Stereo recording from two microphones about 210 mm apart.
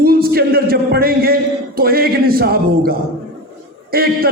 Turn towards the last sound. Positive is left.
turn(degrees=-45)  # may be behind; listen again after turning